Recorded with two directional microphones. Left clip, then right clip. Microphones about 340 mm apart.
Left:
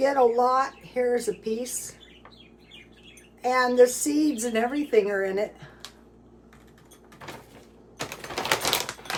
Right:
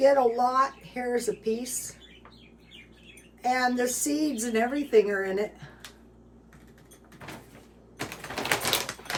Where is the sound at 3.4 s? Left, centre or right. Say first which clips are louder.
Left 6 dB; centre.